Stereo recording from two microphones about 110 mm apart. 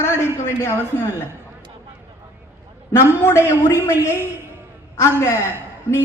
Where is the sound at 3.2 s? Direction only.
25° left (ahead or behind).